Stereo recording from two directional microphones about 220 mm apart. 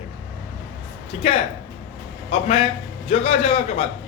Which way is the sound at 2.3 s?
25° left (ahead or behind).